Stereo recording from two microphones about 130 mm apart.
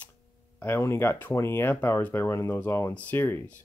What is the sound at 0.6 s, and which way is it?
Speech, 15° left (ahead or behind).